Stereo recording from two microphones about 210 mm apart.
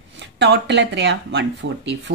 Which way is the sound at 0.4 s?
55° right (ahead or behind).